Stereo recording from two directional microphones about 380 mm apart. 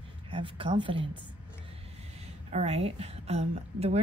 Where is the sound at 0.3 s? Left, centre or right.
Centre.